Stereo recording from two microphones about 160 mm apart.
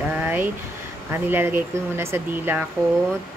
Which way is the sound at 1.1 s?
15° right (ahead or behind).